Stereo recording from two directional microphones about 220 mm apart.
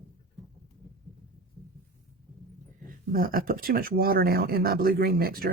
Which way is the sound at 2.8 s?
40° right (ahead or behind).